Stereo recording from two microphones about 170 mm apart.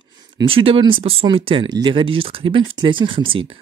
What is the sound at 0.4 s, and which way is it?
Speech, 30° right (ahead or behind).